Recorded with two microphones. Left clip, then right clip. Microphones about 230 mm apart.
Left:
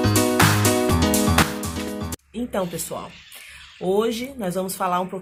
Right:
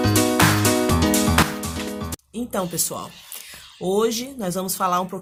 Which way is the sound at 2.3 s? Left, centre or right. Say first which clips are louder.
Even; right.